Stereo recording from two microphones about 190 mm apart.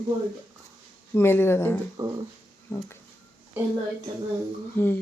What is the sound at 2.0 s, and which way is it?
Speech, 20° right (ahead or behind).